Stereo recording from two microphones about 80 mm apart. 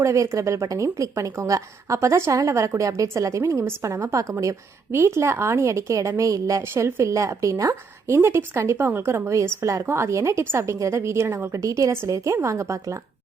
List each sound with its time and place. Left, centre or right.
0.0 s a woman's voice: right
6.6 s a woman's voice: right
11.5 s a woman's voice: right